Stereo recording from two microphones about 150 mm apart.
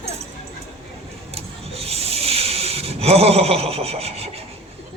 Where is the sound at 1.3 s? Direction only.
40° right (ahead or behind).